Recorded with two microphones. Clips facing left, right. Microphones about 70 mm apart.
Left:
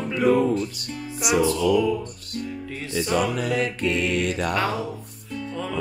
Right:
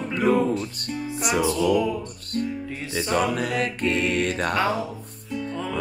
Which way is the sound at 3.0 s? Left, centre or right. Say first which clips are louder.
Even; right.